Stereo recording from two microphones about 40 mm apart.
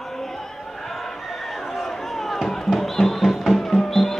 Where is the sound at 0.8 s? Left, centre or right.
Centre.